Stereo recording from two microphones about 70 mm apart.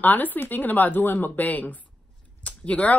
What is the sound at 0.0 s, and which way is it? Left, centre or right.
A woman's voice, left.